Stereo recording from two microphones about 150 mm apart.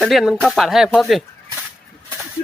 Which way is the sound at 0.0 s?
Centre (ahead or behind).